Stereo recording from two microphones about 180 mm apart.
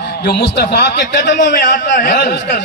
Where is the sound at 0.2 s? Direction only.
60° left (ahead or behind).